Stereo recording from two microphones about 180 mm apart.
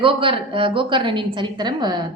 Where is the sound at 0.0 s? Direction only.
30° right (ahead or behind).